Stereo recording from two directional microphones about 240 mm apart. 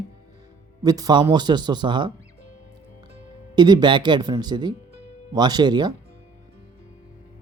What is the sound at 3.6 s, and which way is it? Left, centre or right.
Speech, centre.